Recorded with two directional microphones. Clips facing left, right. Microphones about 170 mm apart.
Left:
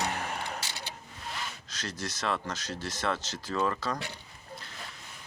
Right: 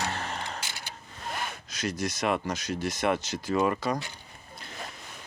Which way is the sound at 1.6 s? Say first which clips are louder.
Right 7 dB; 10° right (ahead or behind).